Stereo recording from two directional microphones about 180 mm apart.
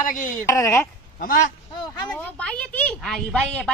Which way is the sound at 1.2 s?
50° left (ahead or behind).